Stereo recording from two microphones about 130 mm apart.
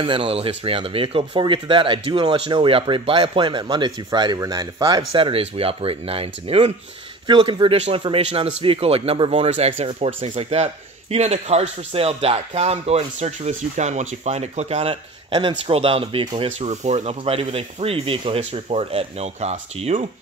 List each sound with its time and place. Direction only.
0.0 s speech: 45° right (ahead or behind)
15.3 s speech: 40° right (ahead or behind); by 20.1 s 55° right (ahead or behind)